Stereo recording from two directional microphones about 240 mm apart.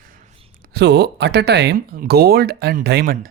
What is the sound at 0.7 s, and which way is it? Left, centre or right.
Speech, right.